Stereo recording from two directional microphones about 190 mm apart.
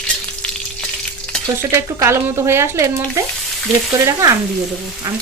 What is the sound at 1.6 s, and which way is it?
Speech, 15° right (ahead or behind).